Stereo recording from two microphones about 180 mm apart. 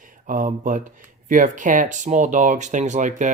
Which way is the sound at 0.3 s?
45° right (ahead or behind).